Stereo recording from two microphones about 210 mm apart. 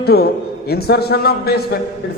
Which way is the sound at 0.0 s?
50° left (ahead or behind).